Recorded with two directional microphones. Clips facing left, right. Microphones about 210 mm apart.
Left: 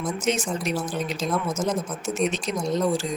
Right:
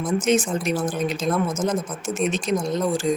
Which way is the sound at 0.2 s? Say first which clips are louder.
Right 5 dB; 50° right (ahead or behind).